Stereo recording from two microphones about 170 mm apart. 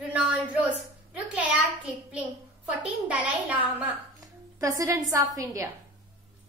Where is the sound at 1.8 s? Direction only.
5° right (ahead or behind).